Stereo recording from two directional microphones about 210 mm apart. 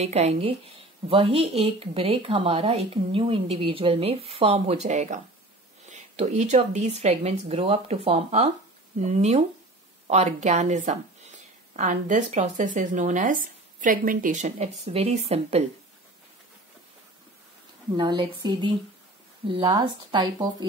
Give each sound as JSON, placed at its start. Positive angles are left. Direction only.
{"t": 0.0, "sound": "a woman's voice", "side_deg": -30}
{"t": 17.9, "sound": "speech", "side_deg": -20}